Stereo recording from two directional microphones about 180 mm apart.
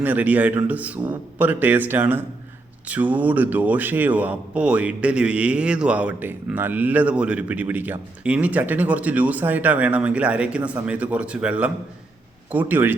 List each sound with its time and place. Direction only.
0.0 s a man's voice: 10° right (ahead or behind)